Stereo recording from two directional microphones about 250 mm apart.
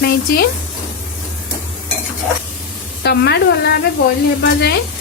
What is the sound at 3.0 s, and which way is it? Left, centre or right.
Speech, left.